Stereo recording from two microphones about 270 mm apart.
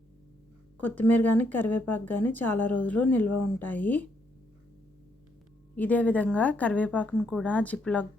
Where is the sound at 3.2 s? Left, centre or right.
Left.